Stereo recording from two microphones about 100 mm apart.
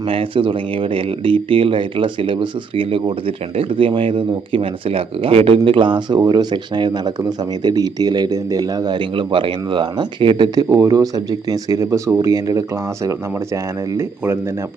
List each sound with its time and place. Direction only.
0.1 s speech: 60° right (ahead or behind); by 12.6 s 35° right (ahead or behind)